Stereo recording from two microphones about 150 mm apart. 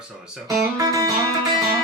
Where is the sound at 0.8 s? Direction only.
25° right (ahead or behind).